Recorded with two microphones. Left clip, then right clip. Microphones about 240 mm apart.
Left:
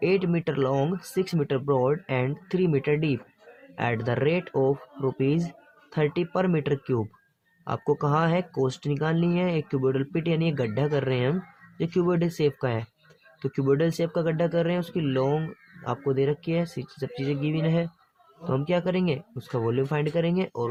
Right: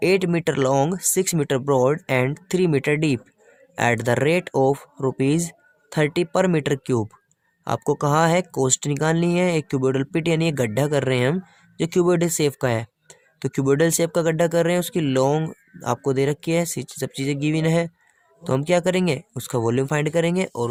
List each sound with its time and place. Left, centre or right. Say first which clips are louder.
0.0 s speech: right 5 dB; right